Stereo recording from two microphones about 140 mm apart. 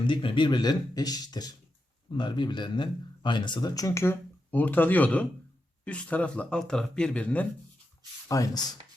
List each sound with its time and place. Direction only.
0.1 s speech: 35° left (ahead or behind); by 7.4 s 10° left (ahead or behind)
8.3 s speech: 25° left (ahead or behind)